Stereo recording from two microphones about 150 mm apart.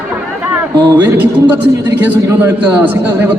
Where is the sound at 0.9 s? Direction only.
10° right (ahead or behind).